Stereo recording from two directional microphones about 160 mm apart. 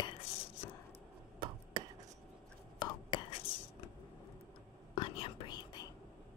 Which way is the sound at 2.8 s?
30° left (ahead or behind).